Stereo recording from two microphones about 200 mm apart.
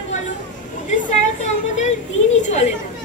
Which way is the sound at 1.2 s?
35° left (ahead or behind).